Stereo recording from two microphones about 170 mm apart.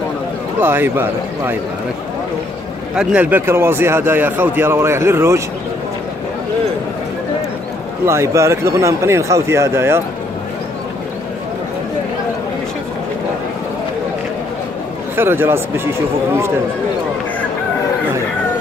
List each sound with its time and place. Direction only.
0.6 s speech: 10° right (ahead or behind)
3.0 s speech: 5° right (ahead or behind)
8.0 s speech: 15° right (ahead or behind)
15.1 s speech: 15° right (ahead or behind)